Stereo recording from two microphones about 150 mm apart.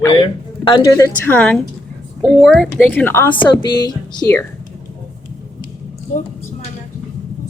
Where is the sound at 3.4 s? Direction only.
30° left (ahead or behind).